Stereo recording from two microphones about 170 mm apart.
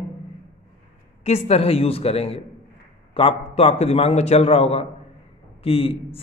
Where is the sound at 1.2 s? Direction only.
40° left (ahead or behind).